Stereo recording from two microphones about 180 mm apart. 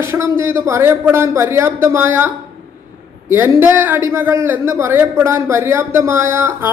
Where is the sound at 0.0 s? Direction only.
15° right (ahead or behind).